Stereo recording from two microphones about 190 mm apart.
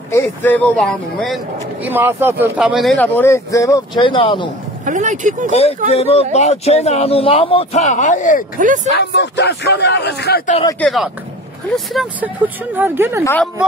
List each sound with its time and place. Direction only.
0.1 s speech: 10° left (ahead or behind)
1.9 s speech: 10° right (ahead or behind)
3.2 s speech: 15° left (ahead or behind)
4.8 s speech: 40° right (ahead or behind)
5.5 s speech: 35° left (ahead or behind)
8.5 s speech: 40° right (ahead or behind)
8.9 s speech: 65° left (ahead or behind)
10.8 s speech: centre (ahead or behind)
13.2 s speech: 10° left (ahead or behind)